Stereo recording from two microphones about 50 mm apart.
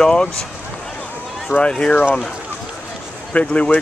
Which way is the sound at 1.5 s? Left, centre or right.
Left.